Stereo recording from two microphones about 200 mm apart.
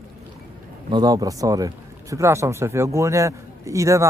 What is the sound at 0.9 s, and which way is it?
A man's voice, 20° right (ahead or behind).